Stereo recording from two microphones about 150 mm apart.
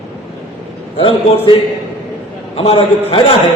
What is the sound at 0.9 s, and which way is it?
A man's voice, 35° left (ahead or behind).